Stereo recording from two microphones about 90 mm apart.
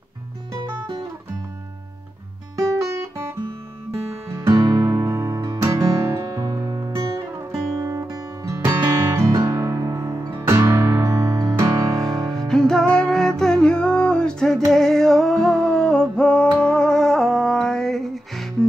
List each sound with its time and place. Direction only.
2.8 s guitar: 40° right (ahead or behind)
4.5 s music: 50° right (ahead or behind)
7.2 s guitar: 35° right (ahead or behind)
12.3 s music: 5° left (ahead or behind)